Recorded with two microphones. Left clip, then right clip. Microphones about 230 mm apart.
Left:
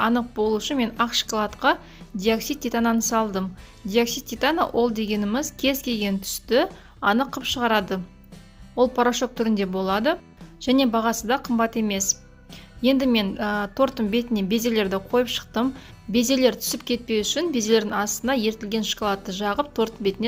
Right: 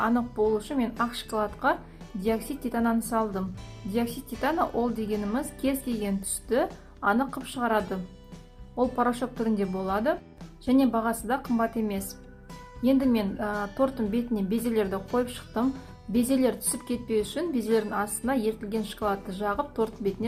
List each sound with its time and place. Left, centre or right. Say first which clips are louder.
0.0 s a woman's voice: left 3 dB; left